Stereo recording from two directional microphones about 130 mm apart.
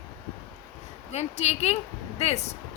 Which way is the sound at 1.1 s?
55° left (ahead or behind).